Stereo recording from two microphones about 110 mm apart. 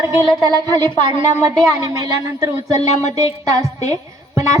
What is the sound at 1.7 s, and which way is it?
A woman's voice, 30° right (ahead or behind).